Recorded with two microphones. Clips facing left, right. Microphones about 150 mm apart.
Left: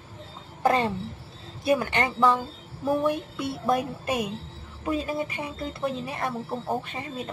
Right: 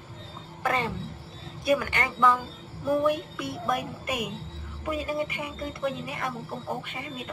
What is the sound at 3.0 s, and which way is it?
Music, 30° left (ahead or behind).